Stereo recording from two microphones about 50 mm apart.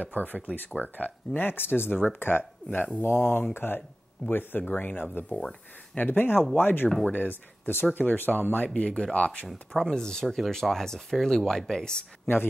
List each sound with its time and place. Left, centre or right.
0.0 s speech: left
1.3 s speech: left
5.3 s speech: centre
5.9 s speech: left
8.7 s speech: left
9.8 s speech: centre